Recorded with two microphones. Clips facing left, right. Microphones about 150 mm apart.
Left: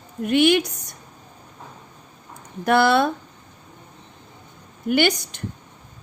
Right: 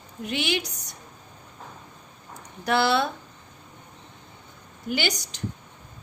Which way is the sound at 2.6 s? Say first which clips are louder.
Left 5 dB; 50° left (ahead or behind).